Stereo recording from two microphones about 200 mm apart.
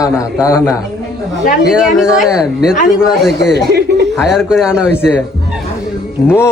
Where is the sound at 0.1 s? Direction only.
5° right (ahead or behind).